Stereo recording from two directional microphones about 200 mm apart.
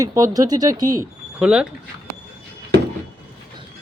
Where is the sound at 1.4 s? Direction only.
5° right (ahead or behind).